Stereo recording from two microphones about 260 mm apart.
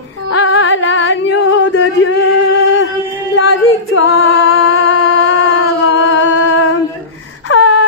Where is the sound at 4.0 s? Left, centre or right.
Left.